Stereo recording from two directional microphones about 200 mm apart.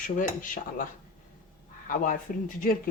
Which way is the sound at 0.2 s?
40° left (ahead or behind).